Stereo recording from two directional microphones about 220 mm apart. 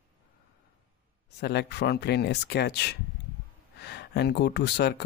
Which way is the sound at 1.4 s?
50° left (ahead or behind).